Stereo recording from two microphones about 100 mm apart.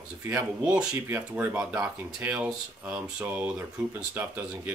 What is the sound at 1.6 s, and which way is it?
Speech, 10° right (ahead or behind).